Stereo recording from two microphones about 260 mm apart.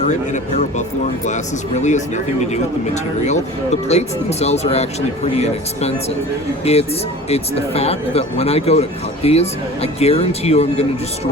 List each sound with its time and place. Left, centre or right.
0.0 s speech: left